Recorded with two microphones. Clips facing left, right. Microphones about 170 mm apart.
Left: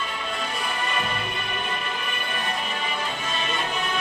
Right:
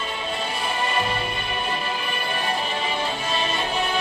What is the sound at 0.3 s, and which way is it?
Music, 30° right (ahead or behind).